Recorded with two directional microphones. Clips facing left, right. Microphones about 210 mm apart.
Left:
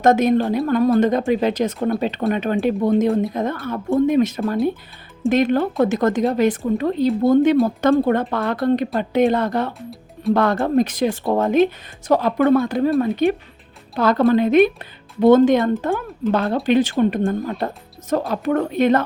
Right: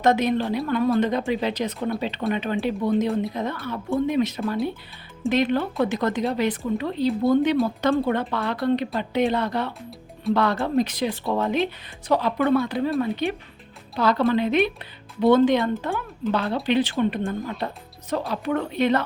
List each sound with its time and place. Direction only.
0.0 s speech: 45° left (ahead or behind)